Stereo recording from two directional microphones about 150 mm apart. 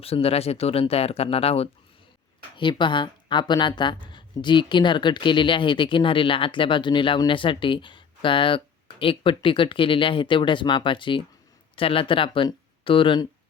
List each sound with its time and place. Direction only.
0.0 s a woman's voice: 40° left (ahead or behind)